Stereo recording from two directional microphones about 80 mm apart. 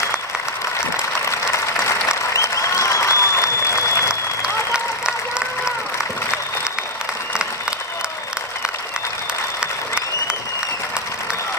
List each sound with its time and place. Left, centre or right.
1.2 s applause: left
4.1 s applause: centre